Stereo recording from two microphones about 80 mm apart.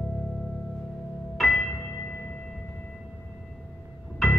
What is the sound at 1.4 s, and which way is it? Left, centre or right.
Music, centre.